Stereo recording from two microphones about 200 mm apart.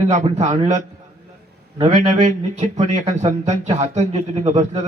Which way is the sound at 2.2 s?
35° right (ahead or behind).